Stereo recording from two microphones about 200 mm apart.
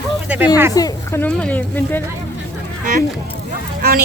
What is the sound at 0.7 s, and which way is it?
Speech, 20° left (ahead or behind).